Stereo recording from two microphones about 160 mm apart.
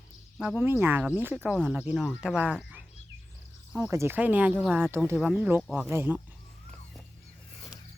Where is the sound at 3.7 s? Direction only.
15° right (ahead or behind).